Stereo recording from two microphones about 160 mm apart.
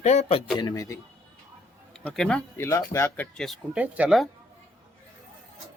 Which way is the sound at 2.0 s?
5° left (ahead or behind).